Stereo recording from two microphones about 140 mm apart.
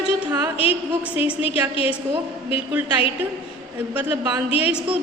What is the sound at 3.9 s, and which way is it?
Speech, 10° right (ahead or behind).